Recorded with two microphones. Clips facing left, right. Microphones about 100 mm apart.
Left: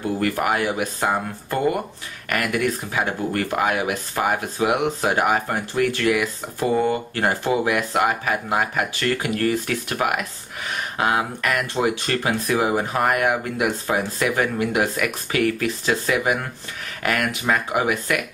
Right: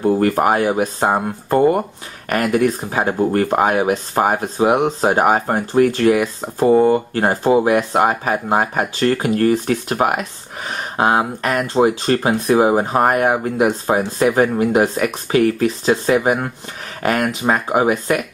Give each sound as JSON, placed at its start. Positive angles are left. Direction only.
{"t": 0.0, "sound": "speech", "side_deg": -35}